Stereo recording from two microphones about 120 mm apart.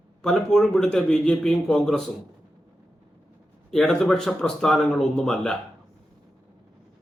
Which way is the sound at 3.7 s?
Centre (ahead or behind).